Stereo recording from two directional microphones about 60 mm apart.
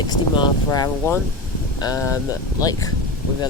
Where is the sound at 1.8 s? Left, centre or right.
Left.